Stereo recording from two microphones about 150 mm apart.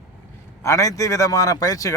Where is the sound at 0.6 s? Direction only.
20° left (ahead or behind).